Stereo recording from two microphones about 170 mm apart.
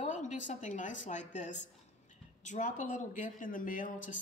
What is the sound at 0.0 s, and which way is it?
A woman's voice, 45° left (ahead or behind).